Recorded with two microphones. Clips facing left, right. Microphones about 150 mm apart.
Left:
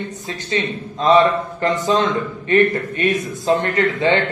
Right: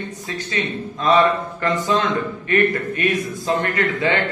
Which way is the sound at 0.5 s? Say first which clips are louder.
Left 4 dB; 25° left (ahead or behind).